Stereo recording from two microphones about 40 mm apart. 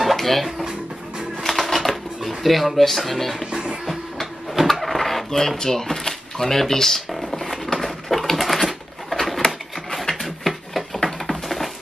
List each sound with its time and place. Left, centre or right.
0.0 s dishes: centre
1.4 s typewriter: centre
3.8 s drawer open or close: centre
9.4 s sewing machine: centre
10.0 s a sound: centre